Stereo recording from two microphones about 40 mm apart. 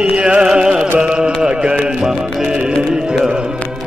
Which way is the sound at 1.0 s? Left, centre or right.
Right.